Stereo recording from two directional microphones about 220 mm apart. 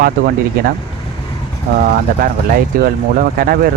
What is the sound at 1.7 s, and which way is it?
Speech, 40° right (ahead or behind).